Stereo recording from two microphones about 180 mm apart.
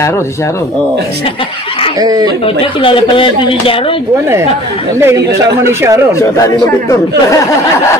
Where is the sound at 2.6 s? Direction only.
30° left (ahead or behind).